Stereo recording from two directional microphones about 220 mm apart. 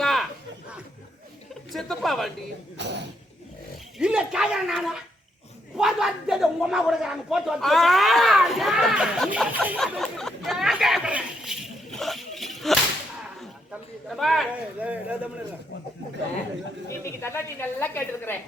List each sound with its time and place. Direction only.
0.0 s a sound: centre (ahead or behind)
1.7 s speech: centre (ahead or behind)
2.7 s speech: 50° right (ahead or behind)
3.9 s speech: 5° right (ahead or behind)
17.0 s a woman's voice: 10° left (ahead or behind)